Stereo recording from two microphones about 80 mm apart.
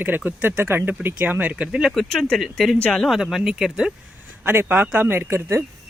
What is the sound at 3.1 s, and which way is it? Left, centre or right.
Speech, centre.